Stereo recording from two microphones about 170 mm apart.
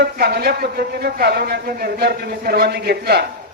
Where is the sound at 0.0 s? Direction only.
65° right (ahead or behind).